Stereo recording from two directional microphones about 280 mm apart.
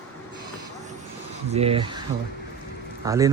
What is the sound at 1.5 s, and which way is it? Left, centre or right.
Speech, right.